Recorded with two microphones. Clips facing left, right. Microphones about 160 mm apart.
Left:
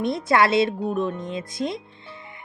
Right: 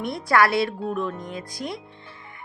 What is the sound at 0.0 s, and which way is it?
Speech, 20° left (ahead or behind).